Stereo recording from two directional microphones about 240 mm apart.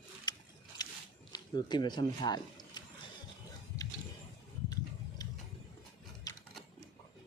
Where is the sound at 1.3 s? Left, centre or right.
Centre.